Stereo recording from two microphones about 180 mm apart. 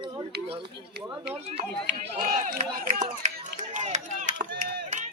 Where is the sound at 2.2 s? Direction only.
45° right (ahead or behind).